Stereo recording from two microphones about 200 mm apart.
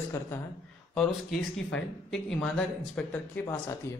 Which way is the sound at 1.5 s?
70° left (ahead or behind).